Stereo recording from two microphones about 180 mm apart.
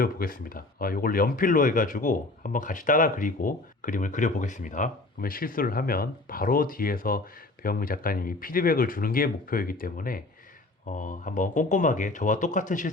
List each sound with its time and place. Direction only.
0.0 s speech: 55° left (ahead or behind)